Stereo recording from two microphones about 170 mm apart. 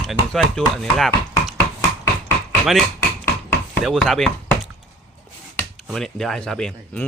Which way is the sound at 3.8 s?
Centre (ahead or behind).